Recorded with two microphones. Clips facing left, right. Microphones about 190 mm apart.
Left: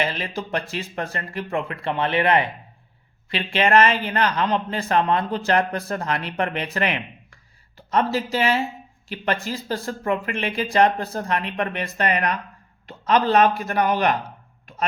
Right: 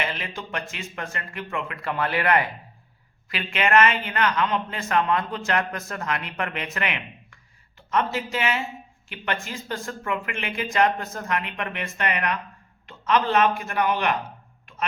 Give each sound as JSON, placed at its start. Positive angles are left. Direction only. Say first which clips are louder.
{"t": 0.0, "sound": "a man's voice", "louder": "left 5 dB", "side_deg": 35}